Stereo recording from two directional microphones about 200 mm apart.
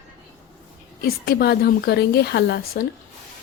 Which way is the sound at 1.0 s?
50° left (ahead or behind).